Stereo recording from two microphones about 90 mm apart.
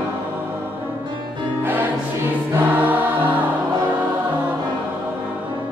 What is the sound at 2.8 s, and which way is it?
Choir, 20° right (ahead or behind).